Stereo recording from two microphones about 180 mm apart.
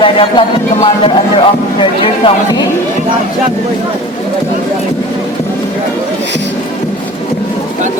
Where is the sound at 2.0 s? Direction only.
30° left (ahead or behind).